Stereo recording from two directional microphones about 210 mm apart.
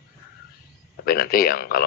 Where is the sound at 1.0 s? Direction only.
45° left (ahead or behind).